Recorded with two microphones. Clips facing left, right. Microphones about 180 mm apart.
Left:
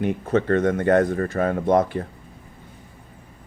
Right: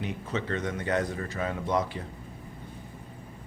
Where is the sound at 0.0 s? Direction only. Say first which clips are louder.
Left 11 dB; 55° left (ahead or behind).